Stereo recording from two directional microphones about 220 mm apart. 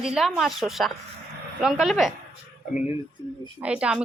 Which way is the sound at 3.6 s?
5° right (ahead or behind).